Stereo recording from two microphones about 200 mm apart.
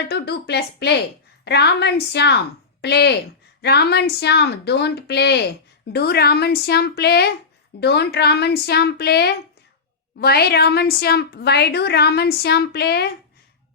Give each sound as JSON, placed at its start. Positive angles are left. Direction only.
{"t": 0.1, "sound": "a woman's voice", "side_deg": 55}